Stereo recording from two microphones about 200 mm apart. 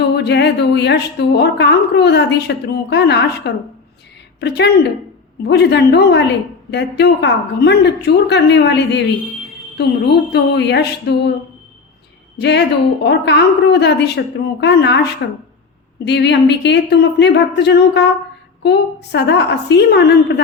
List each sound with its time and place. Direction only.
0.2 s a woman's voice: 55° left (ahead or behind)
12.4 s a woman's voice: 60° left (ahead or behind)